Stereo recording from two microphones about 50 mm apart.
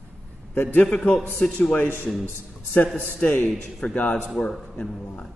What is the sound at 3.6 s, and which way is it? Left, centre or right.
Speech, centre.